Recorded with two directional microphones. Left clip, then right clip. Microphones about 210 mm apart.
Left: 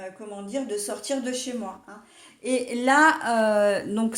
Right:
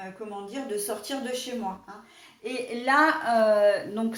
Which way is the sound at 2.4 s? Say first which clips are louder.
Left 4 dB; 50° left (ahead or behind).